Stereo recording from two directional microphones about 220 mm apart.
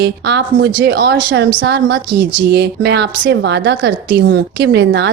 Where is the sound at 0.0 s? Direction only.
50° right (ahead or behind).